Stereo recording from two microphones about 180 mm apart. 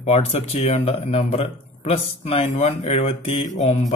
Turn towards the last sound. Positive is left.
turn(degrees=40)  # may be behind; listen again after turning